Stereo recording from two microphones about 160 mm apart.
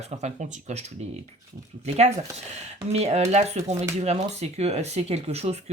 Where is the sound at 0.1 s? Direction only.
45° right (ahead or behind).